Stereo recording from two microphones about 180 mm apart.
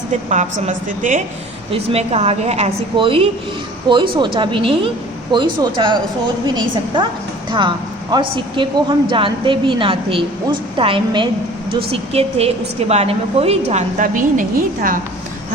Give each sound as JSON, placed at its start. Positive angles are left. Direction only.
{"t": 0.3, "sound": "a woman's voice", "side_deg": -40}
{"t": 1.7, "sound": "a woman's voice", "side_deg": -35}
{"t": 8.1, "sound": "a woman's voice", "side_deg": -25}